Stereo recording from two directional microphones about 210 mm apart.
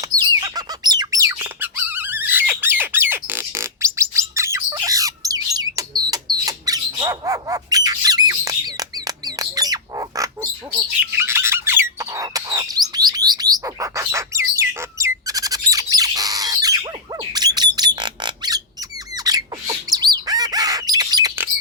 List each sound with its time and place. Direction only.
0.2 s bird: 15° right (ahead or behind)
6.4 s squawk: 15° right (ahead or behind)
17.3 s squeak: 20° right (ahead or behind)
19.1 s bird: 20° right (ahead or behind)